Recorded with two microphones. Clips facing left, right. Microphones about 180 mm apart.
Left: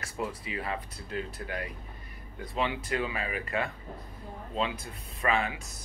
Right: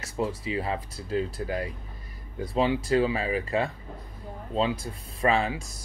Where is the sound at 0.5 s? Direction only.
30° right (ahead or behind).